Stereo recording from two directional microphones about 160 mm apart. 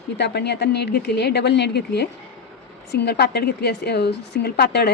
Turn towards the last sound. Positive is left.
turn(degrees=90)